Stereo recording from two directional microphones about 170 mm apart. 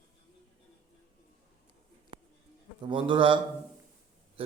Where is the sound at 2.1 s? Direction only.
30° right (ahead or behind).